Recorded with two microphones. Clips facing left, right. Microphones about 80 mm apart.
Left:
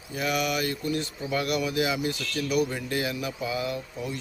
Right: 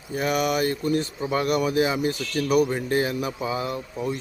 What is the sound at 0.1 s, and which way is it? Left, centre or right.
Speech, right.